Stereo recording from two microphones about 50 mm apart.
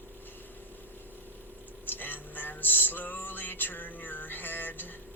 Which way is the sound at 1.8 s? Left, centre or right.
Left.